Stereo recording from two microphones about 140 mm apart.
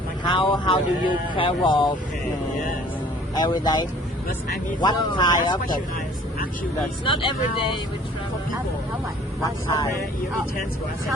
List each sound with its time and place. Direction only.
0.3 s speech: 35° left (ahead or behind)
3.3 s speech: 30° left (ahead or behind)
5.4 s speech: 80° left
7.0 s speech: 35° left (ahead or behind)
9.4 s speech: 20° left (ahead or behind)